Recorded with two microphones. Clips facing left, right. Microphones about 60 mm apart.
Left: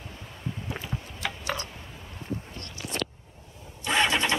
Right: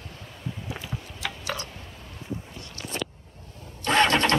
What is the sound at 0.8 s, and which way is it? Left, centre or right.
Tick-tock, centre.